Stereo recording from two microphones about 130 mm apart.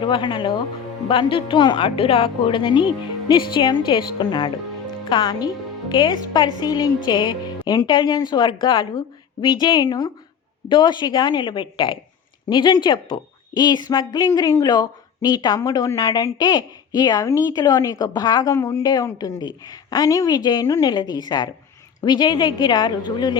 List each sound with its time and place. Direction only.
0.0 s a woman's voice: 35° left (ahead or behind)